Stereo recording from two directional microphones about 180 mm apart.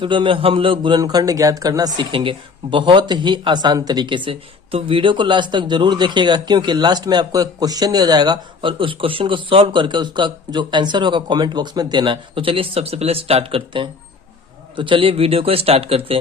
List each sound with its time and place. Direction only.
0.0 s a man's voice: 30° right (ahead or behind)